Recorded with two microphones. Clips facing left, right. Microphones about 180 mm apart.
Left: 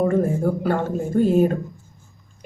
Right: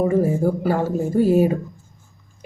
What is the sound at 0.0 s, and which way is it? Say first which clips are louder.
Speech: right 1 dB; 5° right (ahead or behind).